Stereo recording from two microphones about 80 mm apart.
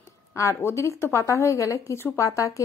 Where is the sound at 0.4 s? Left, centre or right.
Left.